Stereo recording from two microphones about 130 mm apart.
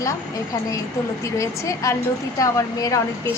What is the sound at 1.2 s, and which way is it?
A woman's voice, 25° left (ahead or behind).